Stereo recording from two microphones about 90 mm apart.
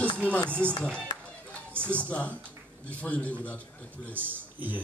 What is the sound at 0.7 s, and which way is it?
Speech, 10° left (ahead or behind).